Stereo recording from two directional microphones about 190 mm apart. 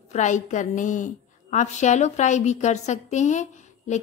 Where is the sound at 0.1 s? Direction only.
40° left (ahead or behind).